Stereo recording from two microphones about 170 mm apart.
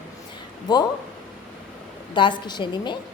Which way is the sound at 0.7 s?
25° left (ahead or behind).